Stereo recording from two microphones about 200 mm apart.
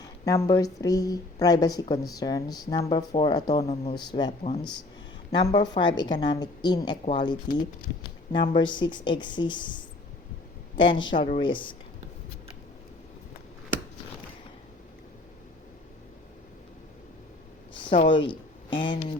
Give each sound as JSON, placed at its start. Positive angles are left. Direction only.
{"t": 0.0, "sound": "a sound", "side_deg": 15}
{"t": 0.5, "sound": "speech", "side_deg": 15}
{"t": 4.3, "sound": "speech", "side_deg": 30}
{"t": 5.5, "sound": "speech", "side_deg": 20}
{"t": 18.3, "sound": "speech", "side_deg": 25}